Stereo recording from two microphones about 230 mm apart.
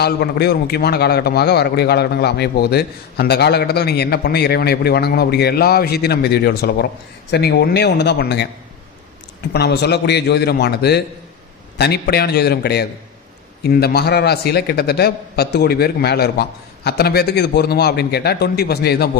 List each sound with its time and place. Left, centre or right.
0.0 s a man's voice: left
9.5 s a man's voice: left